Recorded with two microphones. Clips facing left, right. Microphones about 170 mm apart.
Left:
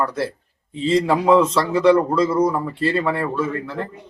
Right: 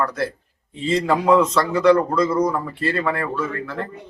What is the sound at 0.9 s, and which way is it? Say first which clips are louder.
Speech: left 2 dB; 5° left (ahead or behind).